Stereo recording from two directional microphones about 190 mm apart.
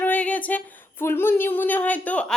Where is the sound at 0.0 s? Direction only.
10° left (ahead or behind).